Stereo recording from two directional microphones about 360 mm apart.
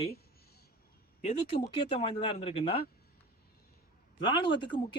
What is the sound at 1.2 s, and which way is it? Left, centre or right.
Speech, centre.